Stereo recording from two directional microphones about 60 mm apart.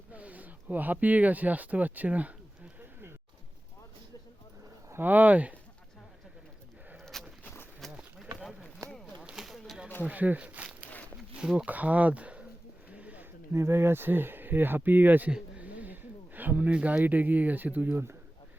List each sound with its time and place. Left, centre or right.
0.1 s speech: right
4.9 s speech: right
7.0 s a sound: centre
9.3 s a sound: centre
10.1 s speech: right
12.9 s a sound: right
13.5 s speech: right
15.3 s speech: right
17.9 s speech: right